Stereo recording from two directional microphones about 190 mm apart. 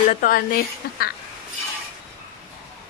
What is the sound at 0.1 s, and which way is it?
A woman's voice, 45° left (ahead or behind).